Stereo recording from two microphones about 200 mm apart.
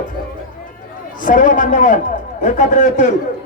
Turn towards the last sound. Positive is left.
turn(degrees=35)  # may be behind; listen again after turning